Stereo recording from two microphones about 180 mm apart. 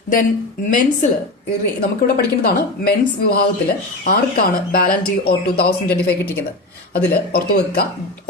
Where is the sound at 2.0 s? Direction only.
60° left (ahead or behind).